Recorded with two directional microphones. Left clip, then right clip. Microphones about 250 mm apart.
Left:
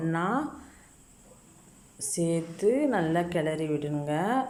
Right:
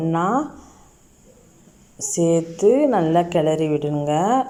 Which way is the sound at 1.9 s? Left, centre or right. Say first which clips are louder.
Right 11 dB; centre.